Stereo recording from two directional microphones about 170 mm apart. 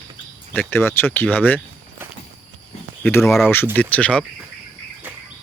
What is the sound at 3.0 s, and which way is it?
Speech, 15° left (ahead or behind).